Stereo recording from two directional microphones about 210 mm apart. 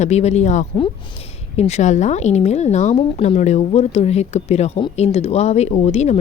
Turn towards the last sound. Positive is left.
turn(degrees=30)  # may be behind; listen again after turning